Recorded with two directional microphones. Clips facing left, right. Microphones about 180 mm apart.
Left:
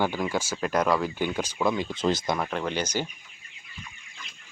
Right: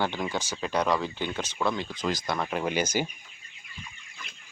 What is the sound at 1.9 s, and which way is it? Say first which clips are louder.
Speech: left 5 dB; 25° left (ahead or behind).